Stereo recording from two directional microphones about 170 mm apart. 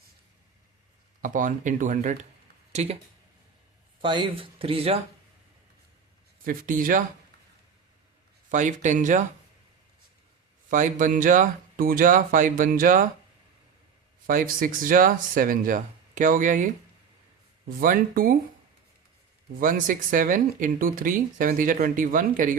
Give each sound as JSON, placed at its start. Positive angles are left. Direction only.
{"t": 1.2, "sound": "speech", "side_deg": -50}
{"t": 4.0, "sound": "speech", "side_deg": -30}
{"t": 6.4, "sound": "speech", "side_deg": -55}
{"t": 8.4, "sound": "speech", "side_deg": -45}
{"t": 10.7, "sound": "speech", "side_deg": -50}
{"t": 14.3, "sound": "speech", "side_deg": -55}
{"t": 17.7, "sound": "speech", "side_deg": -55}
{"t": 19.5, "sound": "speech", "side_deg": -55}